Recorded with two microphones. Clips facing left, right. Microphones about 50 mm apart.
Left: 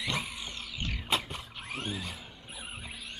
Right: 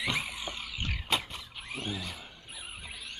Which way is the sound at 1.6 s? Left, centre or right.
Left.